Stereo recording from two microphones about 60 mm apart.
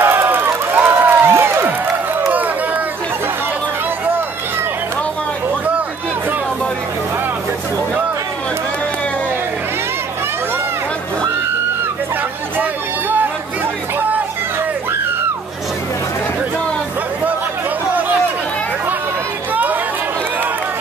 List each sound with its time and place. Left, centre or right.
0.0 s a sound: right
2.3 s run: right
19.5 s chatter: right